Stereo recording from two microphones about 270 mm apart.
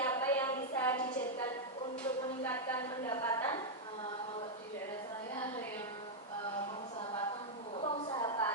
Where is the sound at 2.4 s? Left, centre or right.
Centre.